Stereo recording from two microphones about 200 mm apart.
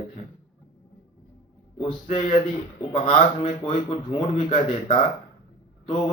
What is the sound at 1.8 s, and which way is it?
A man's voice, 35° left (ahead or behind).